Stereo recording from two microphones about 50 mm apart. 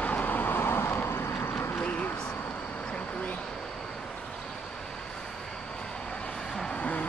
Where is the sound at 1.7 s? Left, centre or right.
Left.